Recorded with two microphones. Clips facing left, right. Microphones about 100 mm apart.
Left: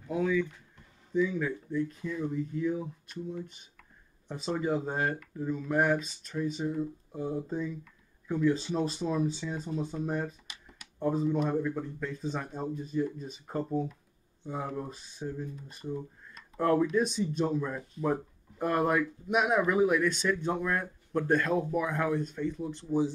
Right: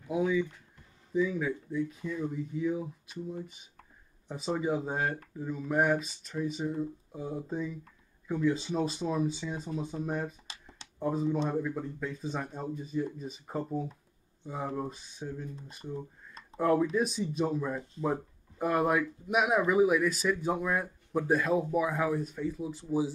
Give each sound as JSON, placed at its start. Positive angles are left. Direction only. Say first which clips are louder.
{"t": 0.1, "sound": "speech", "louder": "even", "side_deg": -10}
{"t": 10.4, "sound": "a sound", "louder": "right 1 dB", "side_deg": -30}
{"t": 11.0, "sound": "speech", "louder": "left 1 dB", "side_deg": 0}